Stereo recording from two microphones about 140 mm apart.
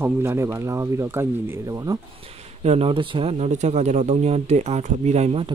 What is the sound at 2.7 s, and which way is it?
Speech, 45° right (ahead or behind).